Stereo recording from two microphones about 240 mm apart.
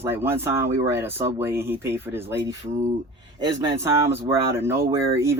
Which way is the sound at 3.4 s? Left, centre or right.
Centre.